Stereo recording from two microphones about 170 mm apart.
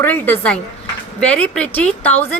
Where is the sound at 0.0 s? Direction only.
10° left (ahead or behind).